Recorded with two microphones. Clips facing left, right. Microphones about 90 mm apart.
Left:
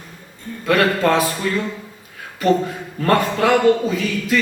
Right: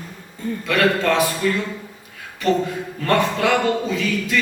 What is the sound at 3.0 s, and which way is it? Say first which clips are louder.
A man's voice: left 2 dB; 35° left (ahead or behind).